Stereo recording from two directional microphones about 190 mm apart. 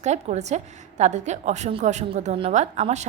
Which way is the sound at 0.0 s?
35° right (ahead or behind).